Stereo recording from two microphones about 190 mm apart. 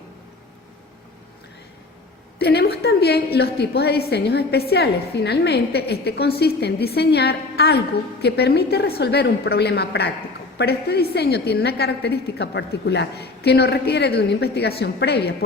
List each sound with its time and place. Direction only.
2.4 s a woman's voice: 60° left (ahead or behind)